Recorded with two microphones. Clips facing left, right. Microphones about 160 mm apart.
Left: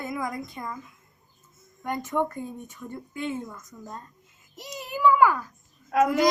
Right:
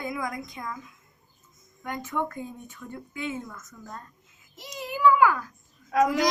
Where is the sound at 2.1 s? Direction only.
10° left (ahead or behind).